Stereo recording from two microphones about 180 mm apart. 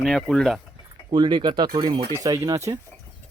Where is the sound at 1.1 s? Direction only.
25° right (ahead or behind).